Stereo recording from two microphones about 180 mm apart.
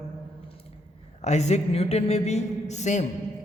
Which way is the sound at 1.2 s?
40° left (ahead or behind).